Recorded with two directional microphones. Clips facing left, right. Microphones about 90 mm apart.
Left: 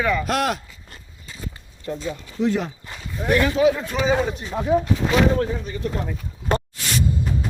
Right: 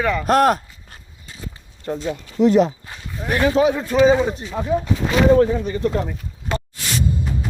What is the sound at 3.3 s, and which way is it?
A man's voice, 35° right (ahead or behind).